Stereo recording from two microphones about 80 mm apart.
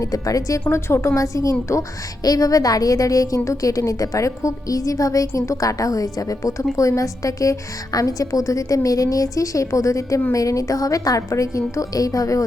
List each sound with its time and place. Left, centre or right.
0.0 s a woman's voice: left
0.7 s a woman's voice: left